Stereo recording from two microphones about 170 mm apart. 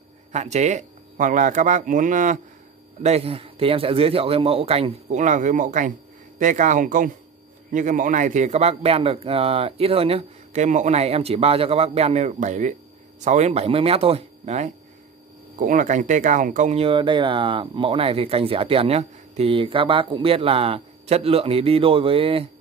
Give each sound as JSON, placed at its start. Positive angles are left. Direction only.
{"t": 0.3, "sound": "speech", "side_deg": -40}
{"t": 3.0, "sound": "speech", "side_deg": -35}